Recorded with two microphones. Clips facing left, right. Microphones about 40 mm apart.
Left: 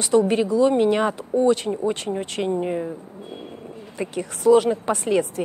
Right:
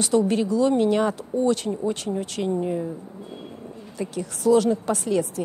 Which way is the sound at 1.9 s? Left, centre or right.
Left.